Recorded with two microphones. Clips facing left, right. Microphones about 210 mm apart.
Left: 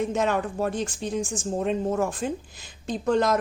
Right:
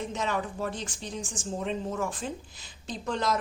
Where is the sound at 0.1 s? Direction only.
55° left (ahead or behind).